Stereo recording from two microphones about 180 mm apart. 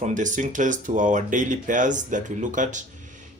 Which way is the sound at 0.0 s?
45° right (ahead or behind).